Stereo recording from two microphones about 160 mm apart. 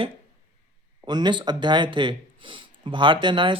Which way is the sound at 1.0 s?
25° right (ahead or behind).